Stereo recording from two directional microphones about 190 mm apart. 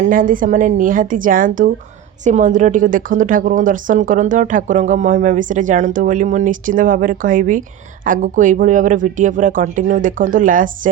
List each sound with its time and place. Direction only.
0.1 s a woman's voice: 45° right (ahead or behind)